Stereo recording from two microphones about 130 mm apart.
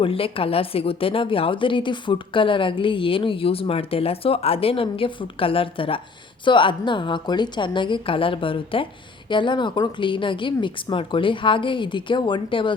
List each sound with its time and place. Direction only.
0.0 s a woman's voice: 45° left (ahead or behind)